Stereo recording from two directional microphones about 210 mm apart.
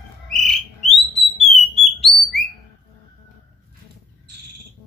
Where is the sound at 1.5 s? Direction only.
Centre (ahead or behind).